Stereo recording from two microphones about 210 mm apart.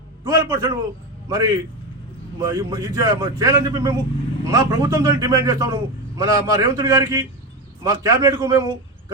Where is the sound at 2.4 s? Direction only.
15° right (ahead or behind).